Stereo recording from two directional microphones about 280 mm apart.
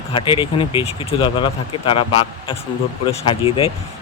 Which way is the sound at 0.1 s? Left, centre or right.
Centre.